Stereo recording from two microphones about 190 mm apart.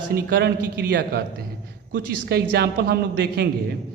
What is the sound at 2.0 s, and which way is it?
A man's voice, 65° right (ahead or behind).